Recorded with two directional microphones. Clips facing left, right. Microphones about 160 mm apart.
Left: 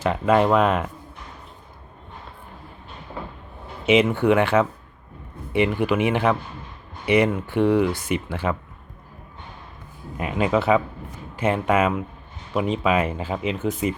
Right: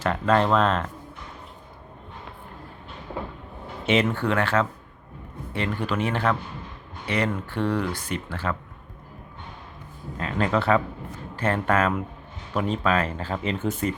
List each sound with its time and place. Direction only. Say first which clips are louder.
0.0 s speech: left 3 dB; 10° left (ahead or behind)
3.8 s speech: left 5 dB; 5° left (ahead or behind)
10.2 s speech: left 3 dB; 15° left (ahead or behind)